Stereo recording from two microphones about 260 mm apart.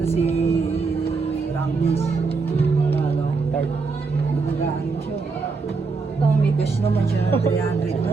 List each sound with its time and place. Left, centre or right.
0.2 s music: left